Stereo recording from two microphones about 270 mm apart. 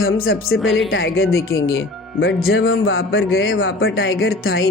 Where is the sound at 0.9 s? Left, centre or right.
Left.